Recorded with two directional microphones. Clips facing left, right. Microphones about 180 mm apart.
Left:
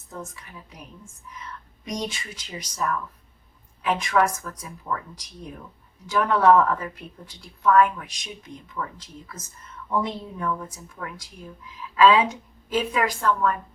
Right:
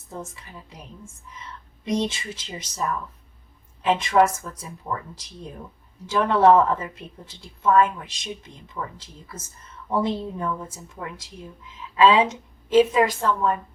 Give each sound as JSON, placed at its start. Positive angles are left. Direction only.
{"t": 1.8, "sound": "a woman's voice", "side_deg": -25}
{"t": 12.7, "sound": "a woman's voice", "side_deg": -25}